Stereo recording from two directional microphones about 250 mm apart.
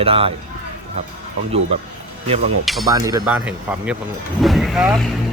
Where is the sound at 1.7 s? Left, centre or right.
Right.